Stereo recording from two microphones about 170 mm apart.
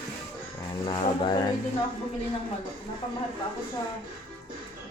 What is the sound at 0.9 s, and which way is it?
Speech, 25° left (ahead or behind).